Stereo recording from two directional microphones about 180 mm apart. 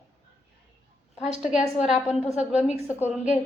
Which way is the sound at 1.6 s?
Centre (ahead or behind).